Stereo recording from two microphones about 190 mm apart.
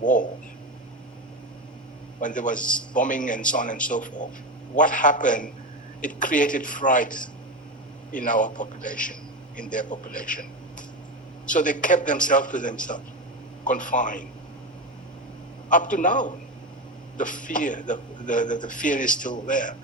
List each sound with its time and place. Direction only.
0.0 s speech: 45° left (ahead or behind)
2.2 s a man's voice: 45° left (ahead or behind)
2.6 s a man's voice: 5° left (ahead or behind)
2.9 s a man's voice: 45° left (ahead or behind)
11.5 s a man's voice: 45° left (ahead or behind)
15.7 s a man's voice: 40° left (ahead or behind)